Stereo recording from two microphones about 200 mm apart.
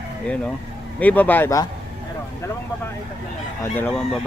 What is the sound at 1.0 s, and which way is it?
Speech, 10° left (ahead or behind).